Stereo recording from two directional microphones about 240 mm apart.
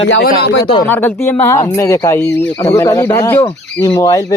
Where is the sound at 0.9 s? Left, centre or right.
Centre.